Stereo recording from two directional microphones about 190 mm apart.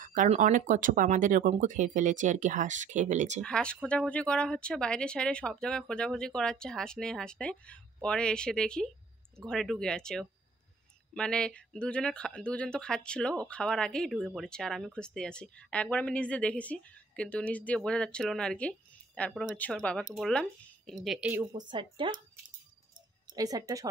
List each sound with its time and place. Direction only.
0.0 s speech: 45° right (ahead or behind)
3.4 s speech: 5° left (ahead or behind)
21.5 s speech: 25° right (ahead or behind)
23.3 s a woman's voice: 20° right (ahead or behind)